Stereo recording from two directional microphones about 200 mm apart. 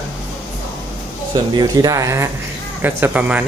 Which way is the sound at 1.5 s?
20° right (ahead or behind).